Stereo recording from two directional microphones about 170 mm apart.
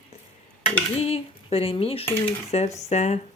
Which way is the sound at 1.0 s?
35° left (ahead or behind).